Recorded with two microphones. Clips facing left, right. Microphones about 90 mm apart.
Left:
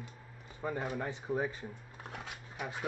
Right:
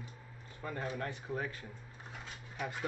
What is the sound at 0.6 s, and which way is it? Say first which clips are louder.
Speech: left 3 dB; 15° left (ahead or behind).